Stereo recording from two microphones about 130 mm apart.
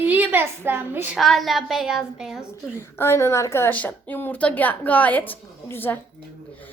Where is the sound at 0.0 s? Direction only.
10° right (ahead or behind).